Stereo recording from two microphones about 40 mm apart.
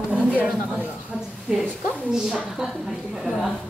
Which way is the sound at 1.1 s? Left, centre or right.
Centre.